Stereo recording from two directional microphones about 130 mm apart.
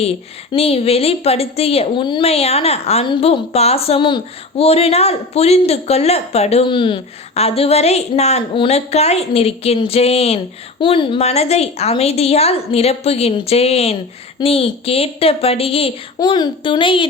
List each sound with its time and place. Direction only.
0.5 s speech: 50° left (ahead or behind)
16.1 s a woman's voice: 35° left (ahead or behind)